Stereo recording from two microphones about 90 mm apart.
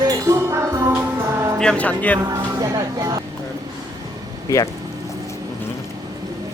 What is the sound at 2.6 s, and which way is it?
Speech, 45° right (ahead or behind).